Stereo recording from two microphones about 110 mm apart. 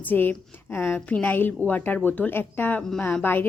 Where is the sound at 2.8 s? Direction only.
5° left (ahead or behind).